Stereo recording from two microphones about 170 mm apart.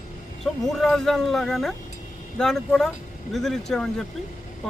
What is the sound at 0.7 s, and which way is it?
Speech, centre (ahead or behind).